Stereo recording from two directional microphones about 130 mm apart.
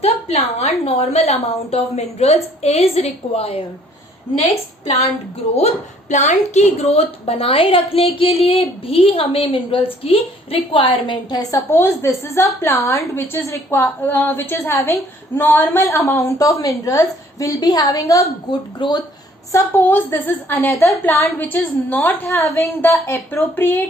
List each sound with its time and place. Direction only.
0.0 s a woman's voice: 55° left (ahead or behind)
6.1 s a woman's voice: 65° left (ahead or behind); by 11.3 s 40° left (ahead or behind)
11.5 s a woman's voice: 20° left (ahead or behind)
19.5 s a woman's voice: 20° left (ahead or behind)